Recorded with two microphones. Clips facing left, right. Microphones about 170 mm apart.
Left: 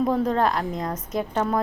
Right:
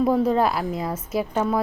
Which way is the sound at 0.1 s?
10° right (ahead or behind).